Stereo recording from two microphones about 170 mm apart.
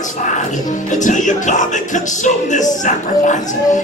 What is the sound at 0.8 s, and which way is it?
Music, 45° left (ahead or behind).